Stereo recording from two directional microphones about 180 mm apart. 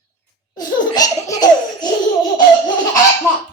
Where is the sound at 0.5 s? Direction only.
20° left (ahead or behind).